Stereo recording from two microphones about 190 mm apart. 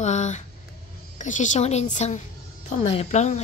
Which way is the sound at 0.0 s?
40° left (ahead or behind).